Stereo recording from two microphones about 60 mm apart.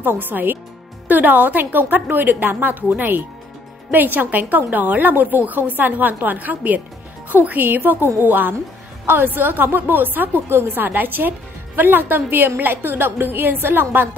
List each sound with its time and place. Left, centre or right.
0.0 s a woman's voice: right